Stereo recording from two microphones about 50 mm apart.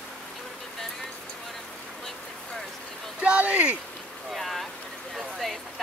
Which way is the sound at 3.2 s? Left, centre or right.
Right.